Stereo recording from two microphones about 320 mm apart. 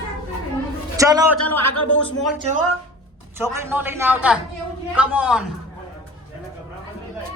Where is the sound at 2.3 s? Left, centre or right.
Right.